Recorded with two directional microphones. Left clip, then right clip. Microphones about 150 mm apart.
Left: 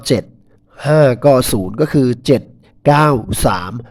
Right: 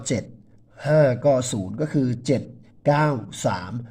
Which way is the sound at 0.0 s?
40° left (ahead or behind).